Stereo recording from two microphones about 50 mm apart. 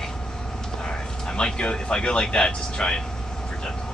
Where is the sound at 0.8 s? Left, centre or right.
Centre.